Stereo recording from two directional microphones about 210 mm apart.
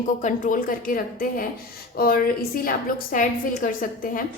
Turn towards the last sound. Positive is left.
turn(degrees=40)  # may be behind; listen again after turning